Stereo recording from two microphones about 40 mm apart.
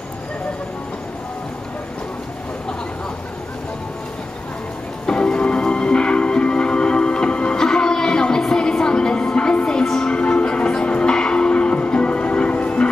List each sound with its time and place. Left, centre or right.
5.0 s music: left
8.7 s a sound: left
9.8 s music: left